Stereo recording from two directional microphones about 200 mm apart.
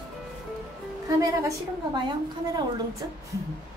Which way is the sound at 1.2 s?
15° right (ahead or behind).